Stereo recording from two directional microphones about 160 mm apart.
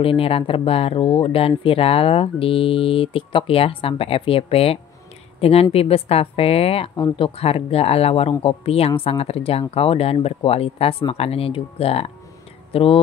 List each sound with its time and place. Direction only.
0.0 s speech: 35° left (ahead or behind)